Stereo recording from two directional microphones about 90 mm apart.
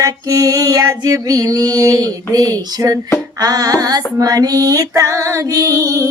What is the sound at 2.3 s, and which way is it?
Music, 45° right (ahead or behind).